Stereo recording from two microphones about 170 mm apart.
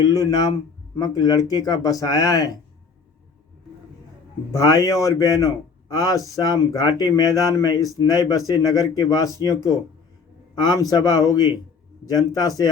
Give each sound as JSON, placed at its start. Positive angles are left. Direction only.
{"t": 0.0, "sound": "speech", "side_deg": 20}
{"t": 4.6, "sound": "speech", "side_deg": 20}